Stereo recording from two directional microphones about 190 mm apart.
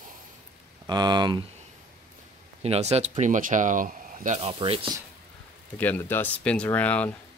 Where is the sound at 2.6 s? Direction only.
35° right (ahead or behind).